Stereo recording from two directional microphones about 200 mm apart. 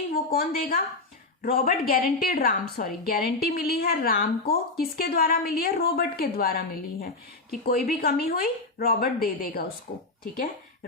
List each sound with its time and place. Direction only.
0.1 s a woman's voice: 45° left (ahead or behind)